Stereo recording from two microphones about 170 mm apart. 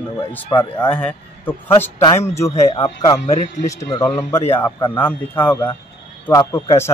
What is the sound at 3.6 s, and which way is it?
A man's voice, 20° left (ahead or behind).